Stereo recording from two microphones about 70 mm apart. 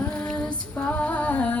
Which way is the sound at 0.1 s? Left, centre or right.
Centre.